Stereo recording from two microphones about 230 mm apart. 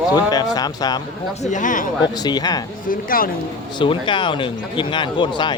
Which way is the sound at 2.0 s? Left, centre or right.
Centre.